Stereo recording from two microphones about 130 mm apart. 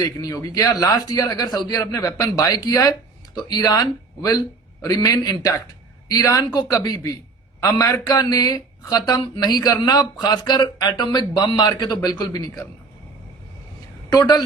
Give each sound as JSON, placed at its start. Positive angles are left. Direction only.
{"t": 0.0, "sound": "speech", "side_deg": 25}
{"t": 14.1, "sound": "speech", "side_deg": 30}